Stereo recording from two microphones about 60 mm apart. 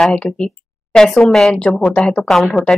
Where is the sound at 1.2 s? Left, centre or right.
Centre.